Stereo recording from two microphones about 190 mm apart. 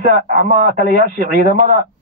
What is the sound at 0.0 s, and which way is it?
Speech, 45° right (ahead or behind).